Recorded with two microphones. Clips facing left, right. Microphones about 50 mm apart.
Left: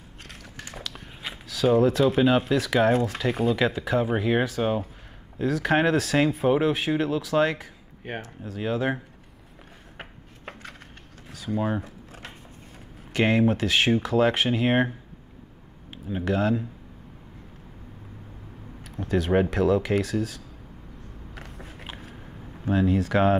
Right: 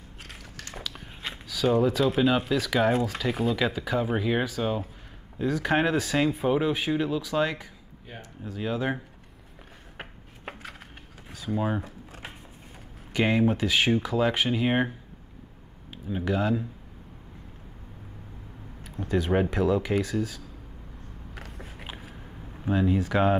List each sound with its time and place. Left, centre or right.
0.7 s speech: centre
5.4 s speech: centre
8.0 s speech: left
9.9 s chopping: centre
11.2 s speech: centre
13.1 s speech: centre
15.9 s a sound: centre
16.3 s speech: centre
18.9 s speech: centre
21.4 s biting: centre
22.7 s speech: centre